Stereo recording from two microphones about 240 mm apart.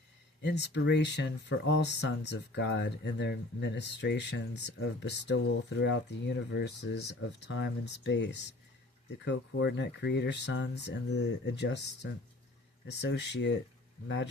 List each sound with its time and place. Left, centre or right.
0.4 s speech: left
12.9 s speech: left